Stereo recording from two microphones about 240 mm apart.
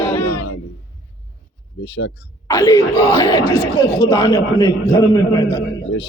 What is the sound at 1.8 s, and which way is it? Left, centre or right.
Speech, left.